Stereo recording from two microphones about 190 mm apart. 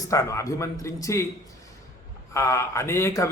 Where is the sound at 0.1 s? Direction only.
15° left (ahead or behind).